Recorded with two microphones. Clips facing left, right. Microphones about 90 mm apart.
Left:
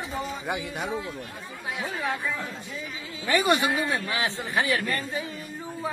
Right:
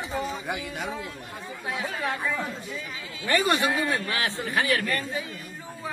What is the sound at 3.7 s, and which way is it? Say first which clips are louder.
Speech: even; 20° left (ahead or behind).